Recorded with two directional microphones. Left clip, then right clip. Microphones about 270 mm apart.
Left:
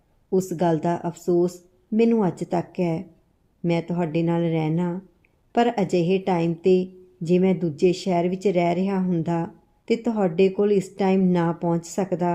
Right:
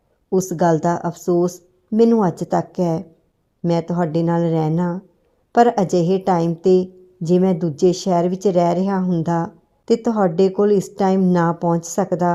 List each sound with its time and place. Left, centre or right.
0.3 s a woman's voice: centre